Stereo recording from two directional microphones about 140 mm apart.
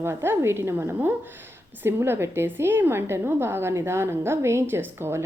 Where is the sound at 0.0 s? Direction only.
15° right (ahead or behind).